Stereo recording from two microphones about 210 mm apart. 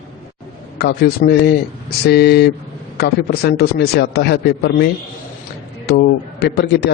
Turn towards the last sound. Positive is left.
turn(degrees=50)  # may be behind; listen again after turning